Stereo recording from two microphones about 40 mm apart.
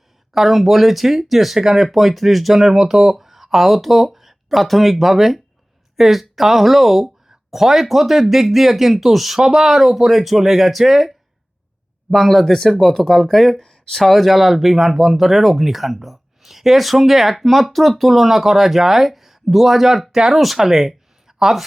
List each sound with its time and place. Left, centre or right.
0.3 s speech: centre
20.1 s speech: centre
20.6 s a sound: centre